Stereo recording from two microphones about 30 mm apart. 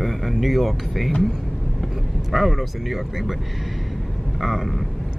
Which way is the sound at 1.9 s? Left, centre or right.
Centre.